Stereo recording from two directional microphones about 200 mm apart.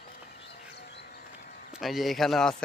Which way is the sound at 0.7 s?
55° left (ahead or behind).